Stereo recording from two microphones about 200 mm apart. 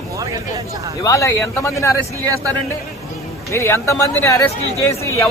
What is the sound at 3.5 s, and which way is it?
A man's voice, 15° left (ahead or behind).